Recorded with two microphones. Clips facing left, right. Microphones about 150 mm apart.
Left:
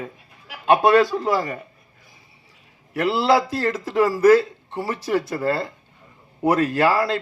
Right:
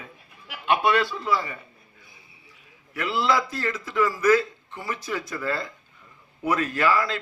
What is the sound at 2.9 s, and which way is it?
Speech, 35° left (ahead or behind).